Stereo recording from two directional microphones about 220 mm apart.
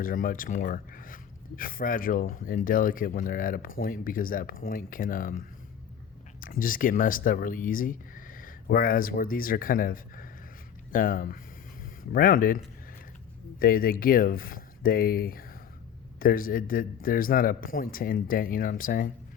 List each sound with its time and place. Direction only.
0.0 s speech: 40° left (ahead or behind)